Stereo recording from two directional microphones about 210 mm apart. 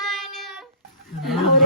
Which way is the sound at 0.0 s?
Centre (ahead or behind).